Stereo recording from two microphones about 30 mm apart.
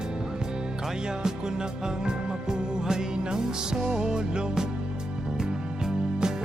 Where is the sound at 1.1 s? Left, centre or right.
Right.